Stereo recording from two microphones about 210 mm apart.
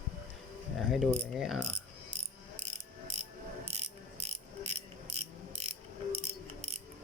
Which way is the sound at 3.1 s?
30° right (ahead or behind).